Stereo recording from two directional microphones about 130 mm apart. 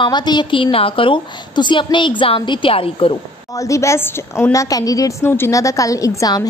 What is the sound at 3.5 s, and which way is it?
A woman's voice, 25° left (ahead or behind).